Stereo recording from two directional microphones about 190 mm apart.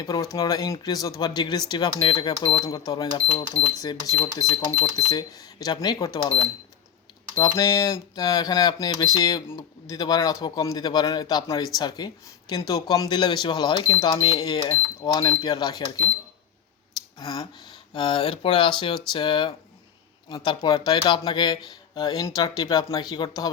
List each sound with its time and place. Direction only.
0.0 s speech: 20° left (ahead or behind)
3.8 s speech: 20° left (ahead or behind)
7.3 s speech: 15° left (ahead or behind)
17.2 s speech: 20° left (ahead or behind)